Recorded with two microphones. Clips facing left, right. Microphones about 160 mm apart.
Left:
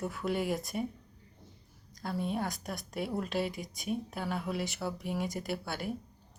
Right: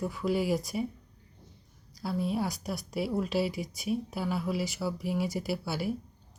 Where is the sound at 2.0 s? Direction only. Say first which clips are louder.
Right 3 dB; 5° right (ahead or behind).